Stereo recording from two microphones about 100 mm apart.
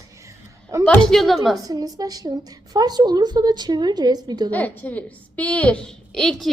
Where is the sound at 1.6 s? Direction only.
40° right (ahead or behind).